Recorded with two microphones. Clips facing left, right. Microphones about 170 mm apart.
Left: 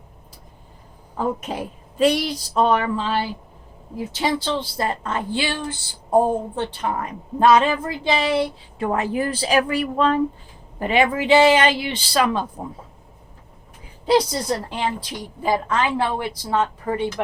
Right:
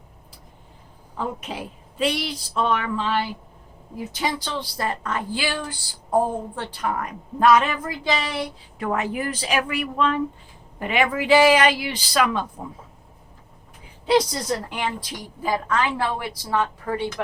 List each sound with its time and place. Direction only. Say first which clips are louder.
1.1 s a woman's voice: left 5 dB; 45° left (ahead or behind)
14.7 s a woman's voice: left 3 dB; 30° left (ahead or behind)